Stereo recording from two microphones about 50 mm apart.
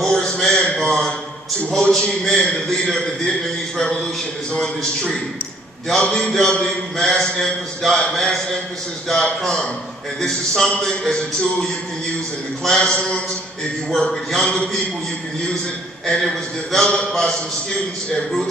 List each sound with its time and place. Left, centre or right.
0.0 s a sound: centre
1.7 s a man's voice: centre
5.9 s a man's voice: centre
12.6 s a man's voice: centre
16.2 s a man's voice: centre